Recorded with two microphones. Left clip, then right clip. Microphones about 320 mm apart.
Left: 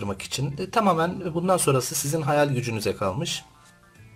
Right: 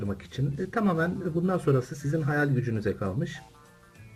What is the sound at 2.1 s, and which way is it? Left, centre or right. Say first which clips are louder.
Speech: left 5 dB; left.